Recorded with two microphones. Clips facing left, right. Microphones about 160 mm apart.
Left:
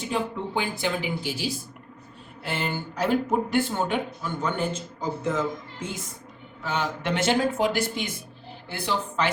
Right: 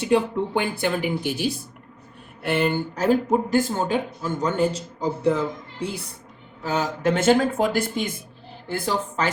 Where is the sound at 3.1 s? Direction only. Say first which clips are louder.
Right 4 dB; 40° right (ahead or behind).